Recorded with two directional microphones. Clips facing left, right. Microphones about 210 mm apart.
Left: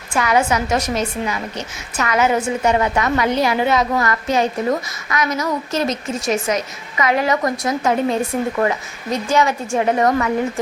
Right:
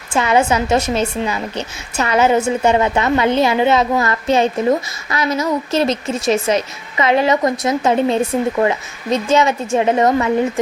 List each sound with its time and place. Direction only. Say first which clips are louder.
0.1 s a woman's voice: right 2 dB; 25° right (ahead or behind)